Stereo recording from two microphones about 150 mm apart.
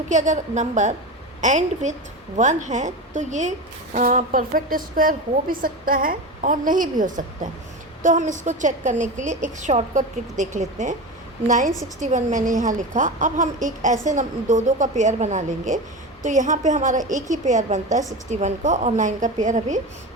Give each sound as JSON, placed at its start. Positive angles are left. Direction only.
{"t": 0.1, "sound": "a woman's voice", "side_deg": -55}